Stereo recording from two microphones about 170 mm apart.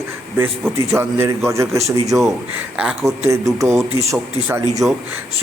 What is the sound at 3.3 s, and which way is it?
A man's voice, 20° right (ahead or behind).